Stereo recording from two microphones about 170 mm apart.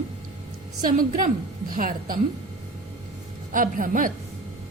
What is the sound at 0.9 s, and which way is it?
A woman's voice, 50° right (ahead or behind).